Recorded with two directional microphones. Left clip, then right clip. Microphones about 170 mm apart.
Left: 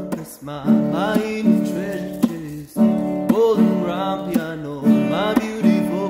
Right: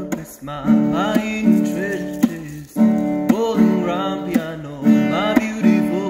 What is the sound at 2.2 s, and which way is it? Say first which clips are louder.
Music: right 1 dB; 15° right (ahead or behind).